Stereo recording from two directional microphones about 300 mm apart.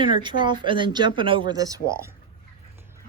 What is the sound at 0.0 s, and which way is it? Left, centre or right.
Speech, centre.